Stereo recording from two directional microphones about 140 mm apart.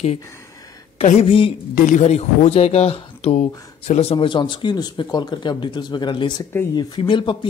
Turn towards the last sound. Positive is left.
turn(degrees=35)  # may be behind; listen again after turning